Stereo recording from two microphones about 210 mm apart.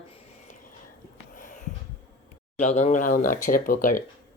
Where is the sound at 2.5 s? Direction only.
35° left (ahead or behind).